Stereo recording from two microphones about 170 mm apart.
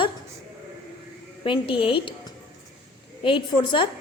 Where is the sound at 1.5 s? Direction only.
30° left (ahead or behind).